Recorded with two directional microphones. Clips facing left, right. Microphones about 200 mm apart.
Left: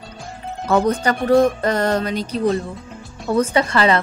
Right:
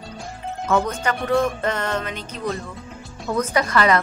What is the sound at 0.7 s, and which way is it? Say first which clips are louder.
Music: left 5 dB; 35° left (ahead or behind).